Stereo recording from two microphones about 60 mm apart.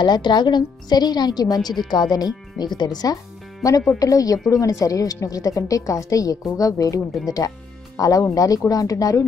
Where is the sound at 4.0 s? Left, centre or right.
Left.